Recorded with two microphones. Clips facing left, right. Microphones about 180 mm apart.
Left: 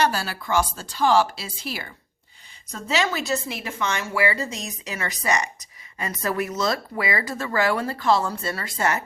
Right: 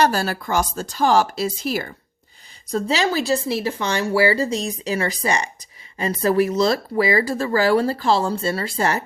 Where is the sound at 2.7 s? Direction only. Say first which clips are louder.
Right 4 dB; 35° right (ahead or behind).